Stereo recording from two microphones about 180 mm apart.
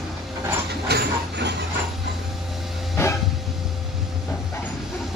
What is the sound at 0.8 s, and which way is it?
Dog, 65° right (ahead or behind).